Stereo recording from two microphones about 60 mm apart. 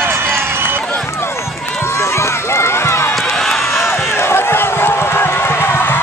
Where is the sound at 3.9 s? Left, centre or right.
Left.